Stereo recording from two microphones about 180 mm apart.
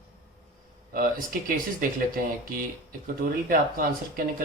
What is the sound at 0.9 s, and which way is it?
Speech, 50° right (ahead or behind).